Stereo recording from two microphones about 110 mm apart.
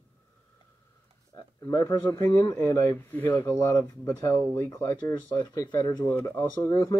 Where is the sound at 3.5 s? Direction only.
25° left (ahead or behind).